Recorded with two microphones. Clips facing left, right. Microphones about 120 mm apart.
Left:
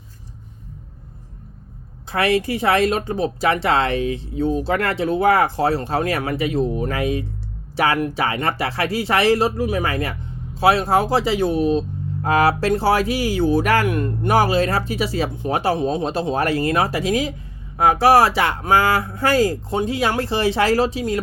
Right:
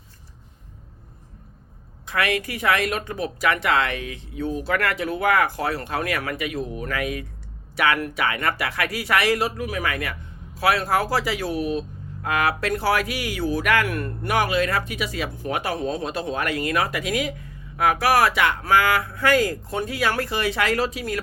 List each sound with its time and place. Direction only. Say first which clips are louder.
2.0 s speech: left 6 dB; 30° left (ahead or behind)
13.8 s speech: left 6 dB; 20° left (ahead or behind)
14.3 s speech: left 4 dB; 30° left (ahead or behind)